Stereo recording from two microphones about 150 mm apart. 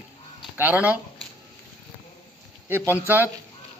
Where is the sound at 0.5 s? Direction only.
10° right (ahead or behind).